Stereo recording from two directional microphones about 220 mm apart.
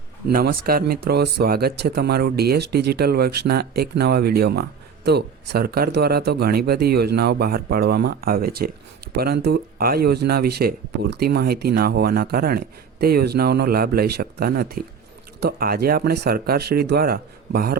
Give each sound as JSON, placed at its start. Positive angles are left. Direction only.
{"t": 0.3, "sound": "speech", "side_deg": -40}